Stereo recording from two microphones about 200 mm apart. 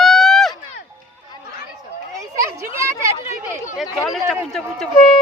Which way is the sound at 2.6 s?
15° right (ahead or behind).